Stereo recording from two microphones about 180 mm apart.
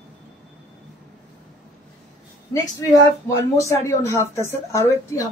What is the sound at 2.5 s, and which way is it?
Speech, 20° left (ahead or behind).